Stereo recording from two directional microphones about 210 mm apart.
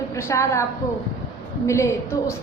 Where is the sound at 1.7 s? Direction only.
15° left (ahead or behind).